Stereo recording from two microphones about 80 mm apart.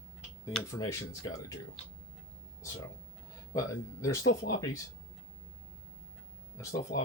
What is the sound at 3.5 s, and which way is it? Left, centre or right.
Speech, left.